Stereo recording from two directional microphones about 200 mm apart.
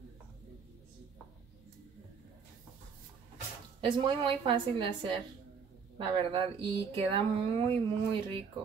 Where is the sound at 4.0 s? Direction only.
25° right (ahead or behind).